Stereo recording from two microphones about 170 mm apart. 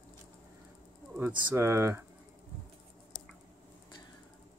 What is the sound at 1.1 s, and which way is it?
Speech, 15° right (ahead or behind).